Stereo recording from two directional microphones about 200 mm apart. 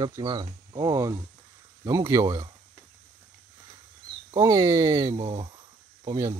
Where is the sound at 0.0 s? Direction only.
20° right (ahead or behind).